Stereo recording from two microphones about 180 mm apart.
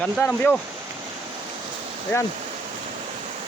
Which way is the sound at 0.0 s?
5° left (ahead or behind).